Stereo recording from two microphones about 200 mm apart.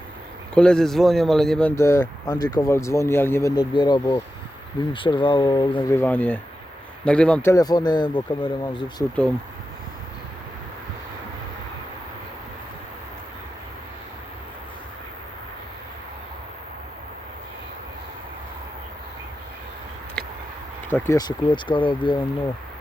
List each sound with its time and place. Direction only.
0.5 s a man's voice: 5° left (ahead or behind)
7.5 s speech: 20° left (ahead or behind)
20.2 s a sound: 5° left (ahead or behind)
20.9 s speech: 15° left (ahead or behind)